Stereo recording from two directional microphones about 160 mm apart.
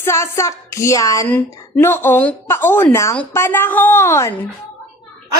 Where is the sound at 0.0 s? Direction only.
15° left (ahead or behind).